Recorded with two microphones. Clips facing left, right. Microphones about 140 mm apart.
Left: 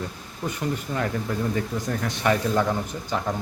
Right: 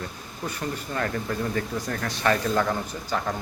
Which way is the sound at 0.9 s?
15° left (ahead or behind).